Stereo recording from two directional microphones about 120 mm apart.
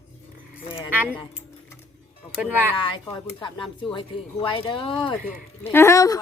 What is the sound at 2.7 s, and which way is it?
Speech, 45° left (ahead or behind).